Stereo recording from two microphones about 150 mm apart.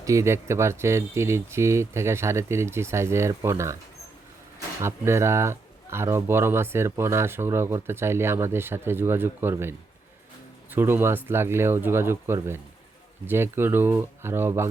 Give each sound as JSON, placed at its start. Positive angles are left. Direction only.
{"t": 0.0, "sound": "speech", "side_deg": -20}
{"t": 4.8, "sound": "speech", "side_deg": -15}